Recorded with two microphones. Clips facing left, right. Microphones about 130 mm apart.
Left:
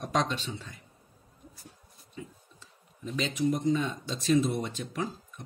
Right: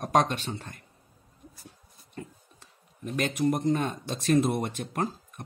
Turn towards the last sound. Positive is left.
turn(degrees=-55)  # may be behind; listen again after turning